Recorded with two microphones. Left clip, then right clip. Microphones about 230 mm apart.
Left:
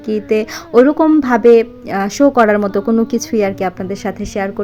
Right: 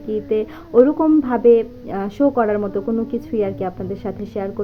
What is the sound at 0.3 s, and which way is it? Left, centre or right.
Speech, left.